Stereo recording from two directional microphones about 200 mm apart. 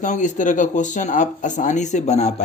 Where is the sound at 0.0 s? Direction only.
35° left (ahead or behind).